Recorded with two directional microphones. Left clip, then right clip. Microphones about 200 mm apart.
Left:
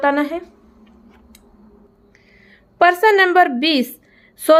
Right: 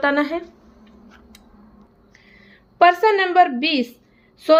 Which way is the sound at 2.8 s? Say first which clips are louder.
Left 2 dB; 20° left (ahead or behind).